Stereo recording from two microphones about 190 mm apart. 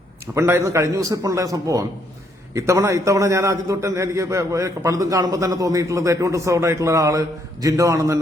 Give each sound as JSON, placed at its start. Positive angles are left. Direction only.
{"t": 0.3, "sound": "a man's voice", "side_deg": -15}